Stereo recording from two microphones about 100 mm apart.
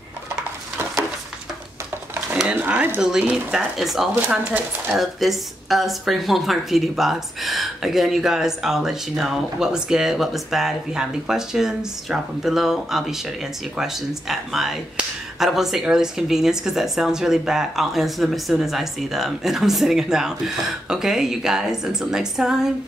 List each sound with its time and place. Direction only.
2.5 s speech: 15° right (ahead or behind)